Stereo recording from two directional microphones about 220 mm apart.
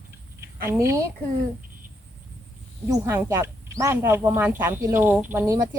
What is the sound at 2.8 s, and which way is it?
Speech, 15° right (ahead or behind).